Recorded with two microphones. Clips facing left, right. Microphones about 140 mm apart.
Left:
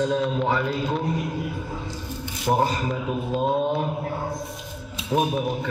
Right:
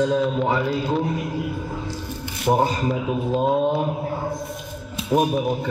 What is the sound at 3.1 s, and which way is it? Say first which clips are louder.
Speech: right 2 dB; centre (ahead or behind).